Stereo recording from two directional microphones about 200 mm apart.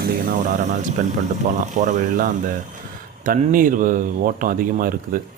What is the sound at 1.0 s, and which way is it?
Speech, 40° right (ahead or behind).